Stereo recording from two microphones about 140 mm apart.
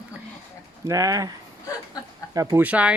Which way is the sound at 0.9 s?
25° right (ahead or behind).